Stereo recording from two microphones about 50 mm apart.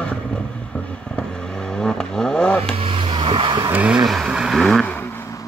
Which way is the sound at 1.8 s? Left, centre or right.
Centre.